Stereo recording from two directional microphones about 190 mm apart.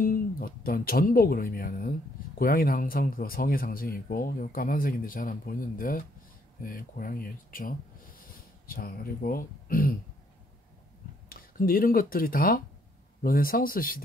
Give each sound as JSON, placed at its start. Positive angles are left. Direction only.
{"t": 0.0, "sound": "speech", "side_deg": 50}
{"t": 11.2, "sound": "speech", "side_deg": 50}